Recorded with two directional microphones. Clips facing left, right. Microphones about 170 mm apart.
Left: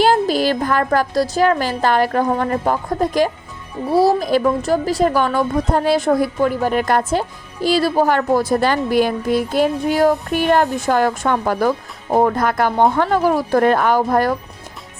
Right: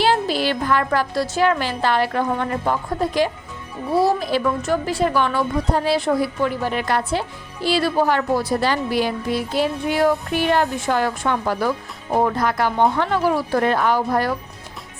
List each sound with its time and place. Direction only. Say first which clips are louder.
0.0 s a woman's voice: left 4 dB; 45° left (ahead or behind)